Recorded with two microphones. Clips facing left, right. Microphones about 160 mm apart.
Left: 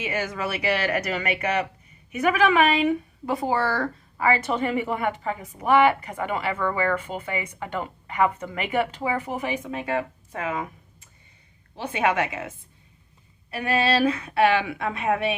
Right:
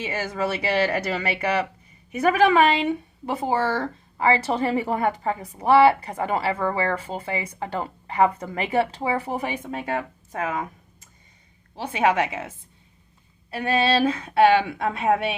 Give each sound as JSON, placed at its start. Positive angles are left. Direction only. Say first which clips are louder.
{"t": 0.0, "sound": "speech", "louder": "right 2 dB", "side_deg": -35}
{"t": 10.3, "sound": "a sound", "louder": "right 1 dB", "side_deg": -45}
{"t": 11.9, "sound": "speech", "louder": "right 2 dB", "side_deg": -30}
{"t": 13.5, "sound": "speech", "louder": "right 1 dB", "side_deg": -30}